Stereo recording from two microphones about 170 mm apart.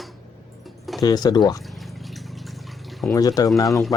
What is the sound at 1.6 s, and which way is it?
Water, centre (ahead or behind).